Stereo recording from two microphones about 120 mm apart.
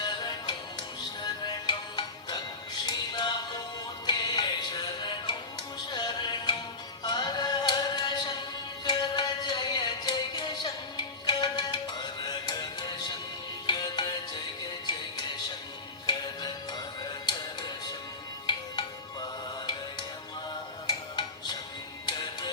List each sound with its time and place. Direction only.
0.0 s music: 35° left (ahead or behind)